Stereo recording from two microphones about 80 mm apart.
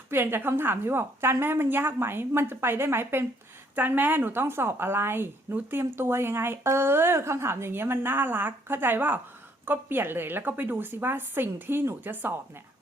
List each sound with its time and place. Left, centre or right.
0.1 s a woman's voice: right